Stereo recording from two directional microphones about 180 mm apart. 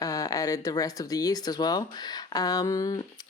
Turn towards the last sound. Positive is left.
turn(degrees=20)  # may be behind; listen again after turning